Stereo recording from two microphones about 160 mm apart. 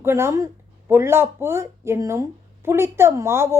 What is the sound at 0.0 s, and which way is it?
Speech, 15° right (ahead or behind).